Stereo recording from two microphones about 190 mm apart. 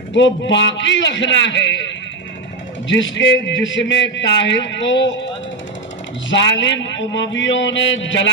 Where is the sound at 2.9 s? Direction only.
70° left (ahead or behind).